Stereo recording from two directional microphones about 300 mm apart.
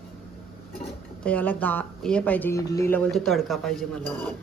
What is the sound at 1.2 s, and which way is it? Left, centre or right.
Speech, centre.